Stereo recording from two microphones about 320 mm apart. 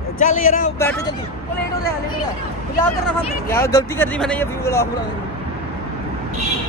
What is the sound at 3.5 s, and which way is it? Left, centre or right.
Speech, centre.